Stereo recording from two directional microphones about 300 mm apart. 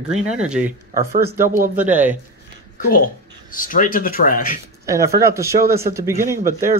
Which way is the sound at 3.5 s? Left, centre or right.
Left.